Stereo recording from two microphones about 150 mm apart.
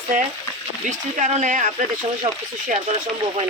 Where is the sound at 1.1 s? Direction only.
55° right (ahead or behind).